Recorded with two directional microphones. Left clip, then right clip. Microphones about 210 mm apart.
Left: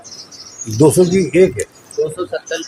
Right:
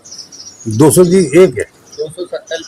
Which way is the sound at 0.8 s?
60° right (ahead or behind).